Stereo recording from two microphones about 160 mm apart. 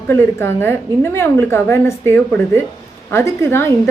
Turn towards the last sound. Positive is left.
turn(degrees=15)  # may be behind; listen again after turning